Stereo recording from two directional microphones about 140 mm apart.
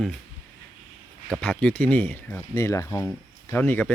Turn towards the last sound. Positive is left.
turn(degrees=15)  # may be behind; listen again after turning